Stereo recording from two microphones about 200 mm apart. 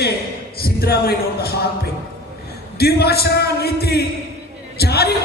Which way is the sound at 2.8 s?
50° left (ahead or behind).